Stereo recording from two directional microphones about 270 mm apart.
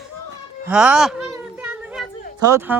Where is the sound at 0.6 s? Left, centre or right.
Centre.